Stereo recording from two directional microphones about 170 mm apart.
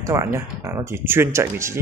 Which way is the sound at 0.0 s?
15° right (ahead or behind).